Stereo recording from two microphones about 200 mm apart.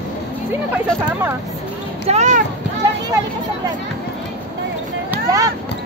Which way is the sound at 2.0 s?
35° right (ahead or behind).